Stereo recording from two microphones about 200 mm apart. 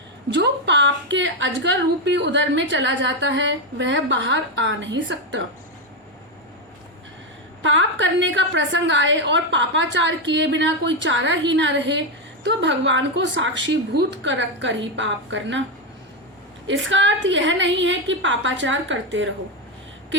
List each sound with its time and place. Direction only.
0.3 s a woman's voice: 60° right (ahead or behind)
7.6 s a woman's voice: 70° right (ahead or behind)
16.6 s a woman's voice: 70° right (ahead or behind)